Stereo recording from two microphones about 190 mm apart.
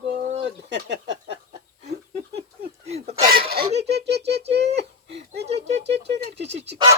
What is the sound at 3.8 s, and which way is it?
Speech, 60° right (ahead or behind).